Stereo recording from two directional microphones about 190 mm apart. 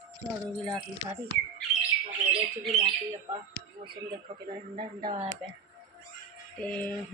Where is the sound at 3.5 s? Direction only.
25° right (ahead or behind).